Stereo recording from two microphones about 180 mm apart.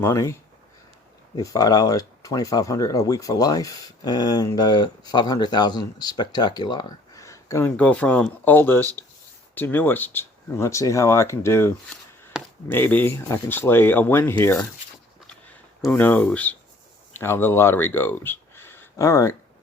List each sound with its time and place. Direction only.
0.0 s speech: 15° left (ahead or behind)
1.4 s speech: 20° left (ahead or behind)
15.8 s speech: 10° left (ahead or behind)